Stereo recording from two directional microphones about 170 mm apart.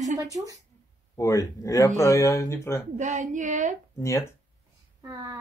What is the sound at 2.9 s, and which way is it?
Speech, 45° right (ahead or behind).